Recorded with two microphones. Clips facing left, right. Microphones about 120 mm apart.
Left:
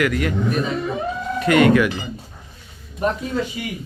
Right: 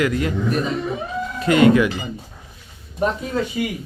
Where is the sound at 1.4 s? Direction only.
30° right (ahead or behind).